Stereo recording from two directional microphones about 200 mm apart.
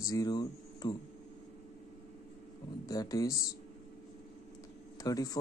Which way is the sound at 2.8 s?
20° left (ahead or behind).